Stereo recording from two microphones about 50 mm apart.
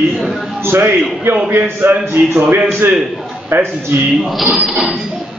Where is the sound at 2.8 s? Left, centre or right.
Right.